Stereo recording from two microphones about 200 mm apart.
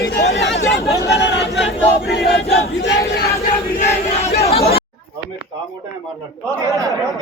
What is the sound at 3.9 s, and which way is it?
Chatter, 35° left (ahead or behind).